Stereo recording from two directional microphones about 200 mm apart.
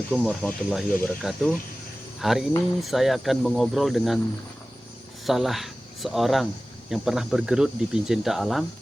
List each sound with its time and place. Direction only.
0.1 s speech: 5° left (ahead or behind)
5.2 s speech: centre (ahead or behind)